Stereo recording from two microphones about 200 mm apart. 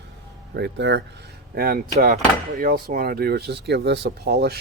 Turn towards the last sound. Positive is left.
turn(degrees=-55)  # may be behind; listen again after turning